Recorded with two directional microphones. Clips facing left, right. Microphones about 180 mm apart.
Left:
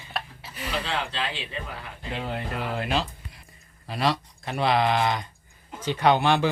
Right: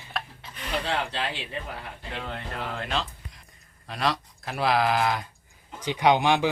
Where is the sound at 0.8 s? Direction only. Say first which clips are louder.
Right 1 dB; 55° right (ahead or behind).